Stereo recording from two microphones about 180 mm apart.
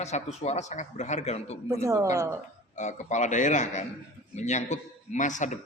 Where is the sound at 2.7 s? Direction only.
40° left (ahead or behind).